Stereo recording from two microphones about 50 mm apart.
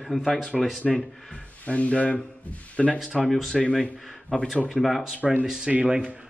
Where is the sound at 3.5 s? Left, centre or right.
Centre.